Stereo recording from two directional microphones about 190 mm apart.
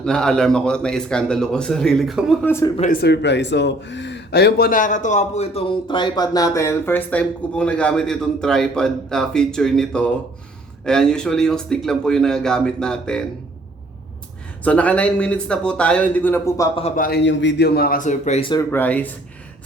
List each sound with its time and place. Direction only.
0.0 s speech: 5° left (ahead or behind)
2.5 s speech: 15° left (ahead or behind)
2.9 s speech: 60° left (ahead or behind); by 13.2 s 5° left (ahead or behind)
14.6 s speech: 5° left (ahead or behind)
17.2 s a man's voice: 70° left (ahead or behind); by 18.6 s 30° left (ahead or behind)
18.7 s speech: 10° left (ahead or behind)